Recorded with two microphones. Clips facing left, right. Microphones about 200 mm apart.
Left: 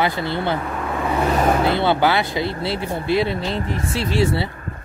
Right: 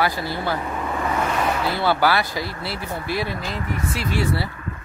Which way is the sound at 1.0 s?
15° left (ahead or behind).